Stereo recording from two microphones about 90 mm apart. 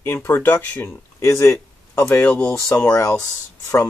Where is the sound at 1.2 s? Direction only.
30° left (ahead or behind).